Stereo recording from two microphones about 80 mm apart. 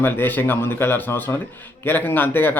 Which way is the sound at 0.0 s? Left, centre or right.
Left.